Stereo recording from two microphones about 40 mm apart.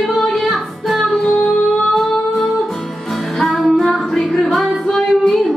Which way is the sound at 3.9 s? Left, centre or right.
Centre.